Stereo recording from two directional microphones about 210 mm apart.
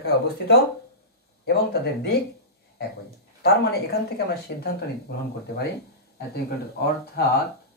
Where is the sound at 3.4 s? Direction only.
50° left (ahead or behind).